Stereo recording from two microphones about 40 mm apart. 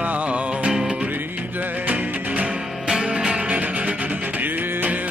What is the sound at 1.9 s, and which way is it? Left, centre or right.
Music, right.